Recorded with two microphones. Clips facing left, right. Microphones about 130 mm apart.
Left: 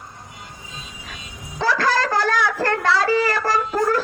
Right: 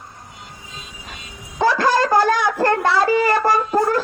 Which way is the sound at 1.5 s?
15° right (ahead or behind).